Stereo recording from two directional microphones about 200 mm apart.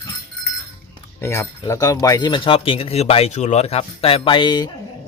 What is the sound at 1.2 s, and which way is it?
Speech, 10° left (ahead or behind).